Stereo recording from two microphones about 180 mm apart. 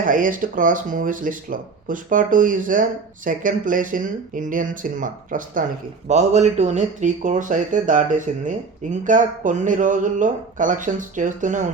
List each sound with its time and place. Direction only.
0.0 s speech: 50° right (ahead or behind)
6.1 s speech: 40° right (ahead or behind)